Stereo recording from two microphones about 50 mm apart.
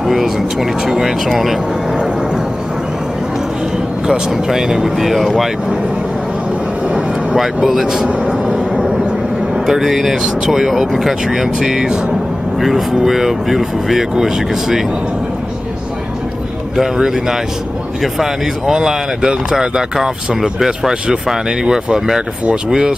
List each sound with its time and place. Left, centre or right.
0.0 s speech: centre
4.1 s speech: centre
7.3 s speech: centre
8.3 s vehicle: centre
9.7 s speech: centre
16.7 s speech: centre